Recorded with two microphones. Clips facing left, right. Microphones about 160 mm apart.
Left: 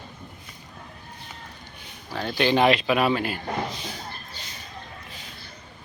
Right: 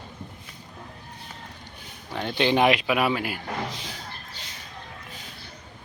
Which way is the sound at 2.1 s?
20° right (ahead or behind).